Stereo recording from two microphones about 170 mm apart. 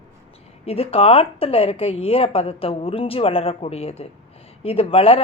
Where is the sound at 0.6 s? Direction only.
35° left (ahead or behind).